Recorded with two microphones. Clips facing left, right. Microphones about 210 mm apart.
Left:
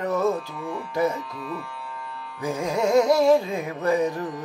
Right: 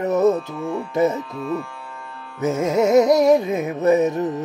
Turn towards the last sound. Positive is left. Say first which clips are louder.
# right 6 dB
turn(degrees=-25)  # may be behind; listen again after turning